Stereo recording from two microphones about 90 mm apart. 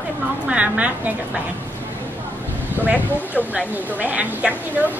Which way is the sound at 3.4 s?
15° right (ahead or behind).